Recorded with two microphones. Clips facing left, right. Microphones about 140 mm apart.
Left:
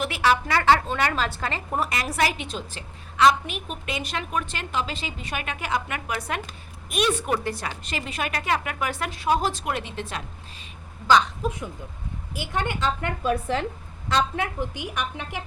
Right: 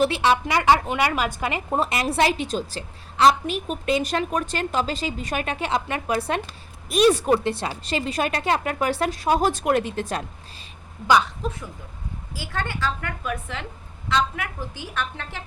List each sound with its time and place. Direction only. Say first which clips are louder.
0.0 s a woman's voice: right 3 dB; 25° right (ahead or behind)
1.7 s a woman's voice: right 5 dB; 25° right (ahead or behind); by 10.2 s 40° right (ahead or behind)
11.4 s a woman's voice: left 1 dB; 10° left (ahead or behind)
12.3 s a woman's voice: left 2 dB; 20° left (ahead or behind)